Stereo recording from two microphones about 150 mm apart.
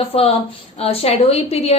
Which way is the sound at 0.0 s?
40° left (ahead or behind).